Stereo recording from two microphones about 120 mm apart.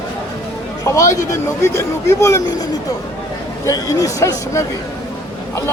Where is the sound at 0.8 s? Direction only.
25° left (ahead or behind).